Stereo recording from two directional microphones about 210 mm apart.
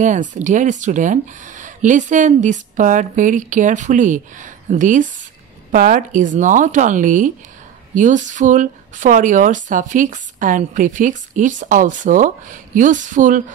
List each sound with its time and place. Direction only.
0.0 s speech: 35° right (ahead or behind)